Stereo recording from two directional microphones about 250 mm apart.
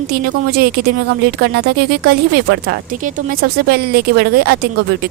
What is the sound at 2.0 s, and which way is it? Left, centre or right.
Speech, right.